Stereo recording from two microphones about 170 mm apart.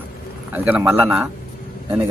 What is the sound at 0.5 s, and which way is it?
Speech, 10° right (ahead or behind).